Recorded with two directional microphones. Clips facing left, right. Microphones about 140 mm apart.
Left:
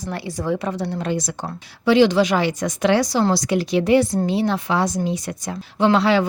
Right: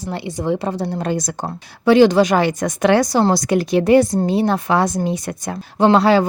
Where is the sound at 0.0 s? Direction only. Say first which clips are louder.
Right 3 dB; 25° right (ahead or behind).